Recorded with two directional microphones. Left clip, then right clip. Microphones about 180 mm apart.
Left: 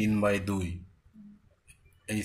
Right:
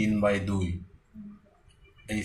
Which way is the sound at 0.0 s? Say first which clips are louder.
Right 2 dB; 45° left (ahead or behind).